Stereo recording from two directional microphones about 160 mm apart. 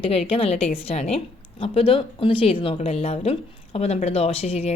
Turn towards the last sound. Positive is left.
turn(degrees=40)  # may be behind; listen again after turning